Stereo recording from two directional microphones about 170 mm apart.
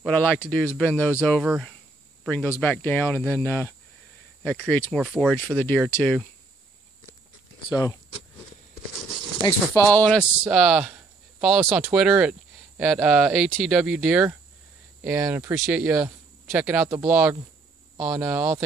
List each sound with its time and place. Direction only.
0.0 s speech: 10° left (ahead or behind)
7.7 s speech: 25° left (ahead or behind)
9.4 s speech: 15° left (ahead or behind)
10.4 s speech: centre (ahead or behind)